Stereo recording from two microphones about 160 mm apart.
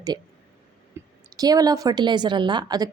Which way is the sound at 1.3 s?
25° right (ahead or behind).